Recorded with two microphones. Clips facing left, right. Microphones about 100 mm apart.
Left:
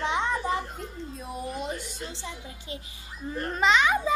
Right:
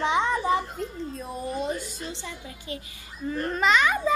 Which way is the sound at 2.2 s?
20° left (ahead or behind).